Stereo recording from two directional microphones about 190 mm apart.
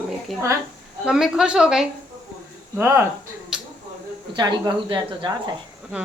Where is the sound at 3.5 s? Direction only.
5° right (ahead or behind).